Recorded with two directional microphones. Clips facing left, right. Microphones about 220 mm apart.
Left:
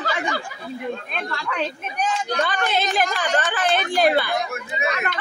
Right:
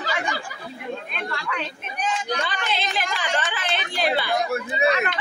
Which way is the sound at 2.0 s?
50° left (ahead or behind).